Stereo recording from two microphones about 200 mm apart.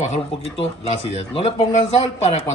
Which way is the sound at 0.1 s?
30° left (ahead or behind).